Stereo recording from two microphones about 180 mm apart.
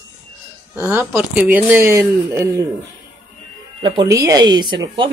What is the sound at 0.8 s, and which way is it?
Speech, 5° right (ahead or behind).